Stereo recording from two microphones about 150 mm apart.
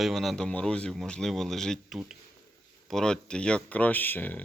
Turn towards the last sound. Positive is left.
turn(degrees=10)  # may be behind; listen again after turning